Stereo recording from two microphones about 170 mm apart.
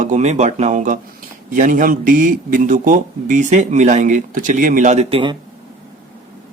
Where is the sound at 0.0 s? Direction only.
45° right (ahead or behind).